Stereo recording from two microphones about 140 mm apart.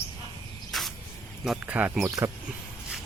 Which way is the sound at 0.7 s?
Centre (ahead or behind).